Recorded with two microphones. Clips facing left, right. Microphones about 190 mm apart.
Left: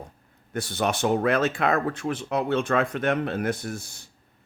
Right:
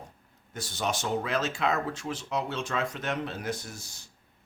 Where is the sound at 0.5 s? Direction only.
60° left (ahead or behind).